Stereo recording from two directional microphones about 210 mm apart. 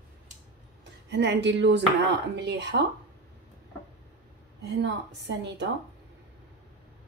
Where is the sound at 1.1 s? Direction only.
55° right (ahead or behind).